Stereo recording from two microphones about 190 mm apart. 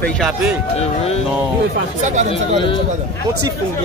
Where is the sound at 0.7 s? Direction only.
30° left (ahead or behind).